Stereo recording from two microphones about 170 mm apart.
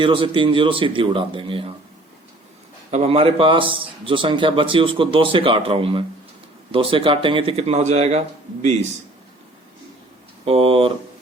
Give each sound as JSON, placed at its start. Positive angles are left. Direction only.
{"t": 0.0, "sound": "a man's voice", "side_deg": -30}
{"t": 2.9, "sound": "a man's voice", "side_deg": -35}
{"t": 10.4, "sound": "a man's voice", "side_deg": -35}